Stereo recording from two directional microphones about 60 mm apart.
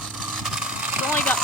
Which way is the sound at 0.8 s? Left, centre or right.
Right.